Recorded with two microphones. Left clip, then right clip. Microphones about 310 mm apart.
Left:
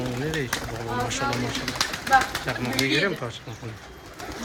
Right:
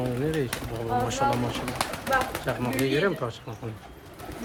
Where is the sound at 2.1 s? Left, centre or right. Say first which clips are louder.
Left 6 dB; centre.